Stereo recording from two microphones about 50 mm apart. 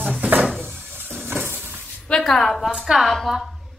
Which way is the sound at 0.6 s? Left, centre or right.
Right.